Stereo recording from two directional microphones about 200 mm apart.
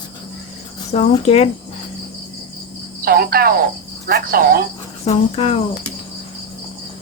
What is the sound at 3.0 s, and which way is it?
Speech, 50° right (ahead or behind).